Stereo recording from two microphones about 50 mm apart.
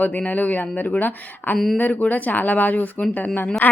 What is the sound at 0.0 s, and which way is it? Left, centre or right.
A woman's voice, left.